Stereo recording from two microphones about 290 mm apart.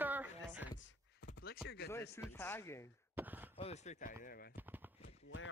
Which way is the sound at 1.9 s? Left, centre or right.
Centre.